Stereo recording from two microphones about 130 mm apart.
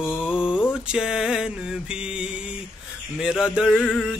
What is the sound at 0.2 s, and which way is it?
Mantra, 5° right (ahead or behind).